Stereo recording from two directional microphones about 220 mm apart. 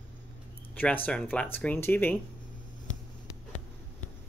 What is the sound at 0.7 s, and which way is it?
Speech, 10° left (ahead or behind).